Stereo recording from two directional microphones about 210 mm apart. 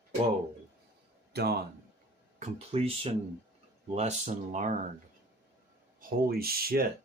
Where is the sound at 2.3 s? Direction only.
30° right (ahead or behind).